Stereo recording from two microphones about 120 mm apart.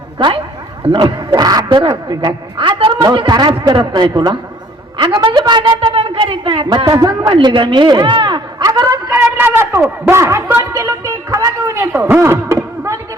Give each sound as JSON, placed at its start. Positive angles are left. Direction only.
{"t": 0.9, "sound": "a woman's voice", "side_deg": -40}
{"t": 9.1, "sound": "a man's voice", "side_deg": -20}